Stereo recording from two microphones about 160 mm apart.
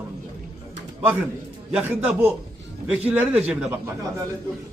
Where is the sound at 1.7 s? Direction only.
10° right (ahead or behind).